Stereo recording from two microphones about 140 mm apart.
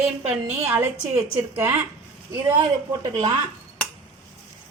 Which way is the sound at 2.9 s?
30° right (ahead or behind).